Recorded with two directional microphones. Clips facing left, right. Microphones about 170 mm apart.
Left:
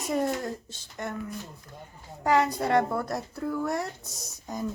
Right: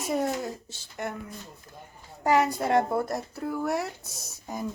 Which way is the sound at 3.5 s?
5° right (ahead or behind).